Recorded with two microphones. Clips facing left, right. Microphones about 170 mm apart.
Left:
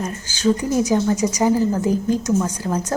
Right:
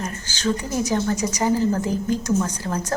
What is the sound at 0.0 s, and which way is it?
Speech, 15° left (ahead or behind).